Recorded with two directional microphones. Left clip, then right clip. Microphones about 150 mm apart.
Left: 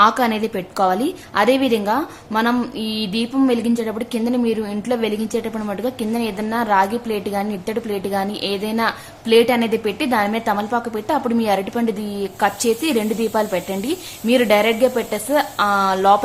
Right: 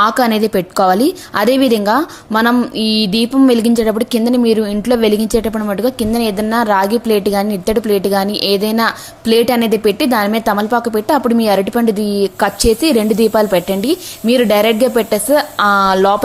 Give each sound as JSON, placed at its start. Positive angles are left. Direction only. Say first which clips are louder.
{"t": 0.0, "sound": "a woman's voice", "louder": "right 3 dB", "side_deg": -45}